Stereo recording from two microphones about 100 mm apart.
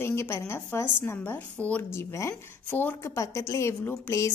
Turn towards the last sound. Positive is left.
turn(degrees=30)  # may be behind; listen again after turning